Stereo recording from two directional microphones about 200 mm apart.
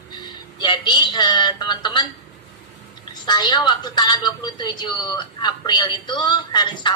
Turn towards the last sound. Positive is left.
turn(degrees=20)  # may be behind; listen again after turning